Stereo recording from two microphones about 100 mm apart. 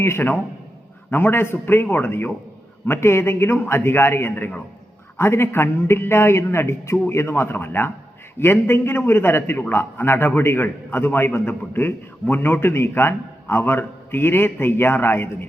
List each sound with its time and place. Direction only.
0.0 s a man's voice: 20° left (ahead or behind)